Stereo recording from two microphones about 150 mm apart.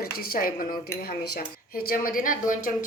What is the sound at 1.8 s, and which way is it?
A woman's voice, 70° left (ahead or behind).